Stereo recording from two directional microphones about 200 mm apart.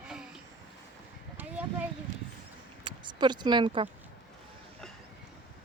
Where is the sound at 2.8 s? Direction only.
20° right (ahead or behind).